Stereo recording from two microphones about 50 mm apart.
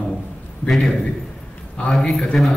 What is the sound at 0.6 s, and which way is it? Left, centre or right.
Speech, centre.